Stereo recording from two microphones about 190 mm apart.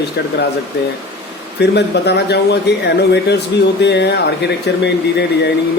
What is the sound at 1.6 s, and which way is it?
Speech, 60° left (ahead or behind).